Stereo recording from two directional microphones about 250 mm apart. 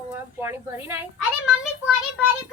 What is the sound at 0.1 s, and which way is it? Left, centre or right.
Speech, centre.